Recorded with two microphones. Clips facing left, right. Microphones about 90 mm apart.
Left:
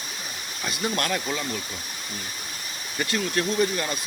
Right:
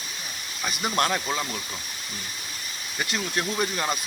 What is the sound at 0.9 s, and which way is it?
Speech, 30° right (ahead or behind).